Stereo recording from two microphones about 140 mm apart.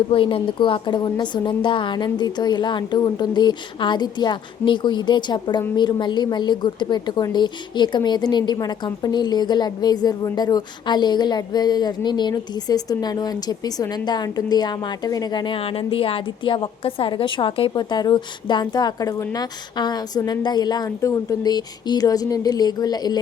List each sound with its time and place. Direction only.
0.1 s a woman's voice: 40° left (ahead or behind)